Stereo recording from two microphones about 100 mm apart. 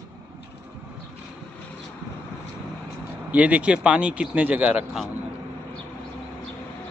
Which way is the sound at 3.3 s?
15° right (ahead or behind).